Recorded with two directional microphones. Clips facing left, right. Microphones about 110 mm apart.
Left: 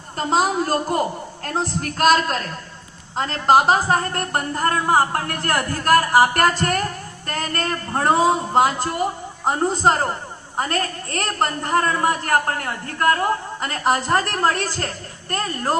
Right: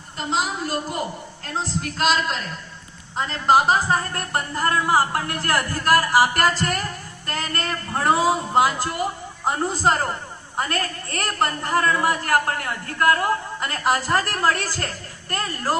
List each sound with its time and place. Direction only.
0.2 s a woman's voice: 40° left (ahead or behind)
1.5 s a woman's voice: 55° left (ahead or behind); by 15.8 s 25° left (ahead or behind)